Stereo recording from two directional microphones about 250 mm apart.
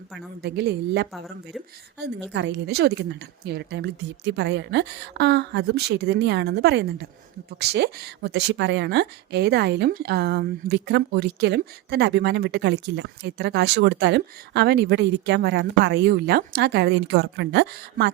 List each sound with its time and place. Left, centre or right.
0.4 s a woman's voice: right